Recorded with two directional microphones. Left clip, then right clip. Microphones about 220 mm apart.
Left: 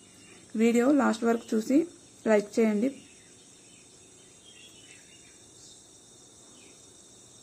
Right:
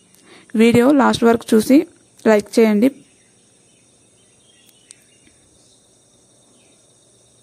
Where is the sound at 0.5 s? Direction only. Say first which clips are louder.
Right 11 dB; 45° right (ahead or behind).